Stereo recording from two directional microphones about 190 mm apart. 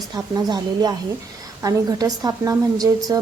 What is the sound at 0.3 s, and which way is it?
A woman's voice, 20° right (ahead or behind).